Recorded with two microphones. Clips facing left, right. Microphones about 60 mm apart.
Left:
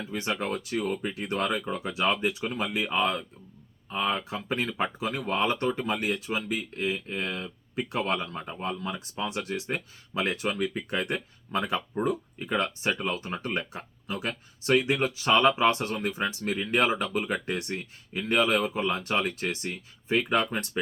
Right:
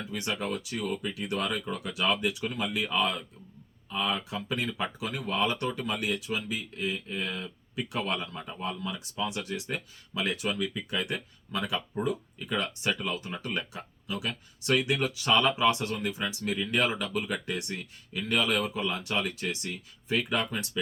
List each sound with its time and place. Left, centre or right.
0.0 s speech: left